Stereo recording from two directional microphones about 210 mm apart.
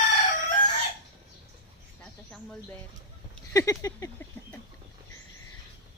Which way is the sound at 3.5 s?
15° left (ahead or behind).